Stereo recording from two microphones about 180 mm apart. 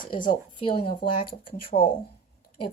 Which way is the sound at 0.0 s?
25° left (ahead or behind).